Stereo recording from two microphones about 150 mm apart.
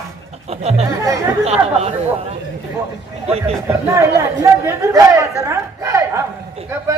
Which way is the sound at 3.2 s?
45° right (ahead or behind).